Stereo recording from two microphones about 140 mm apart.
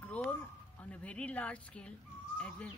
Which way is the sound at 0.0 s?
10° left (ahead or behind).